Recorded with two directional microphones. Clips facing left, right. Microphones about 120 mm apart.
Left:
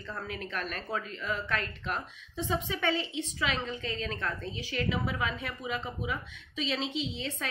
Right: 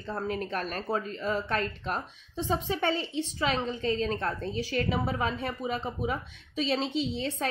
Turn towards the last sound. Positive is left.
turn(degrees=-40)  # may be behind; listen again after turning